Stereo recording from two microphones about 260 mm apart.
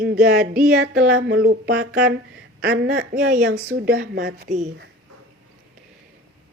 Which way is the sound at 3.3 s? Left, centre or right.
Right.